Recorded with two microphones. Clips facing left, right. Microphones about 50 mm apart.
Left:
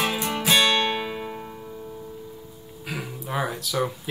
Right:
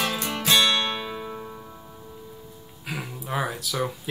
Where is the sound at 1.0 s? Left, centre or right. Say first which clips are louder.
Left 2 dB; left.